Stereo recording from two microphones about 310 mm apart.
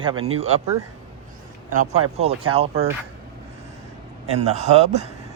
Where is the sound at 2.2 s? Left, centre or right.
Centre.